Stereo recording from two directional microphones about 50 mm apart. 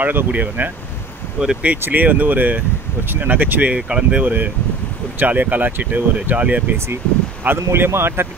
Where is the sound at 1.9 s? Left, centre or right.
Right.